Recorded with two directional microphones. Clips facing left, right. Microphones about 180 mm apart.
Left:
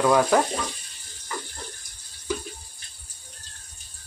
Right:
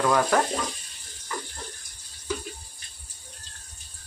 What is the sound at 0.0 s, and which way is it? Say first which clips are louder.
Speech: left 3 dB; 10° left (ahead or behind).